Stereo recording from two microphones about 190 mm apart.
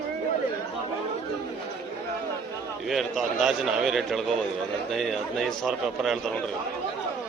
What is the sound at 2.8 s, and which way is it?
A man's voice, centre (ahead or behind).